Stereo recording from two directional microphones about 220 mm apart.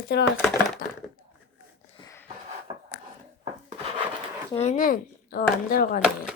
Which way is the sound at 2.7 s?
25° right (ahead or behind).